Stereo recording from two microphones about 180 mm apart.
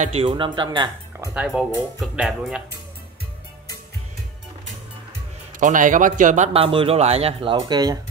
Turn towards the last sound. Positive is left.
turn(degrees=-20)  # may be behind; listen again after turning